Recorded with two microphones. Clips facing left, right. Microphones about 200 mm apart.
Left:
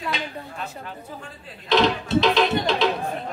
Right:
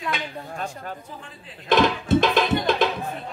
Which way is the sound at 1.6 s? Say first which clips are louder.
Even; 50° right (ahead or behind).